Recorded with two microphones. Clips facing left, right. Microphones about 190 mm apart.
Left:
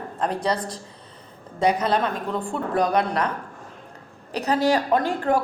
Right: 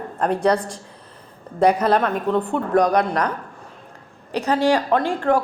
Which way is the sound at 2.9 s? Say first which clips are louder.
Right 3 dB; 35° right (ahead or behind).